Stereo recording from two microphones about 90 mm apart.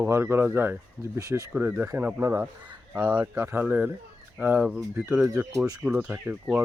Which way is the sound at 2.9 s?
15° right (ahead or behind).